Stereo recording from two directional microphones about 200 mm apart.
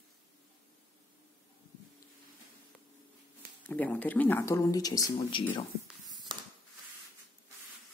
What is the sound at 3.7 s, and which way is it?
Speech, 10° left (ahead or behind).